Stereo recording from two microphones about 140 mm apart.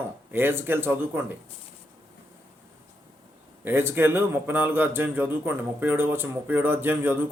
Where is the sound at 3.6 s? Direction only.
15° right (ahead or behind).